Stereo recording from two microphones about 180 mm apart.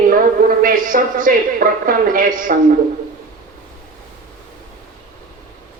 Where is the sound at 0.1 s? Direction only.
50° right (ahead or behind).